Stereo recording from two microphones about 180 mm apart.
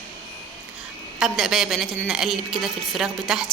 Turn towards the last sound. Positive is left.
turn(degrees=-5)  # may be behind; listen again after turning